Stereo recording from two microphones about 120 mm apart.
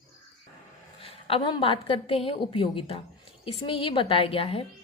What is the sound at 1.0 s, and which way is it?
A woman's voice, 50° left (ahead or behind).